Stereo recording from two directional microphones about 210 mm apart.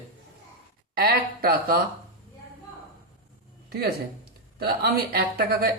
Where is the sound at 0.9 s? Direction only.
45° right (ahead or behind).